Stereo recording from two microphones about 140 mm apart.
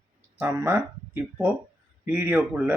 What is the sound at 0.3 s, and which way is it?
Speech, 15° right (ahead or behind).